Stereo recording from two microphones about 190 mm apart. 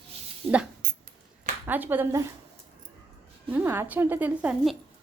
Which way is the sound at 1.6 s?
10° right (ahead or behind).